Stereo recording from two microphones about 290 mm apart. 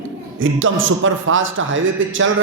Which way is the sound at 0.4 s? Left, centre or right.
Right.